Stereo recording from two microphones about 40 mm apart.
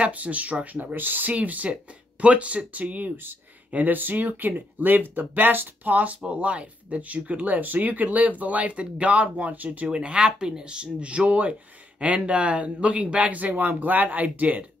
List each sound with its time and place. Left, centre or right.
0.0 s speech: right
0.9 s speech: right
1.3 s speech: right
9.8 s speech: right